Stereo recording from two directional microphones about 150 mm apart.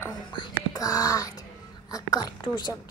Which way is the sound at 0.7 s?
20° left (ahead or behind).